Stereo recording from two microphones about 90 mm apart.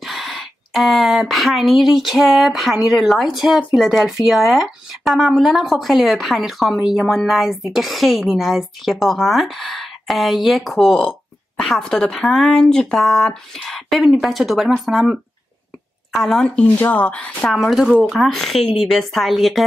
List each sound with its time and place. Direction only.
0.0 s speech: centre (ahead or behind)
16.4 s speech: 15° left (ahead or behind)